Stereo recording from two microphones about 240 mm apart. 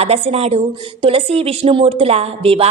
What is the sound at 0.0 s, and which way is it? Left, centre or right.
A woman's voice, right.